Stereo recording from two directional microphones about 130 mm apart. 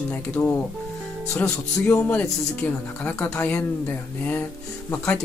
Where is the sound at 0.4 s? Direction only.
10° left (ahead or behind).